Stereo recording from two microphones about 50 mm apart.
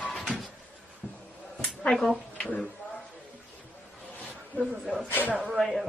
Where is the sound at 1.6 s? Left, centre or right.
Left.